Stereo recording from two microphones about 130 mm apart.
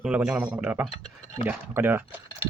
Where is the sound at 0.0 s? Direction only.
10° right (ahead or behind).